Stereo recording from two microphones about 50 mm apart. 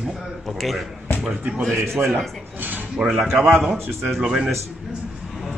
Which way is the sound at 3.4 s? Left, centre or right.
Centre.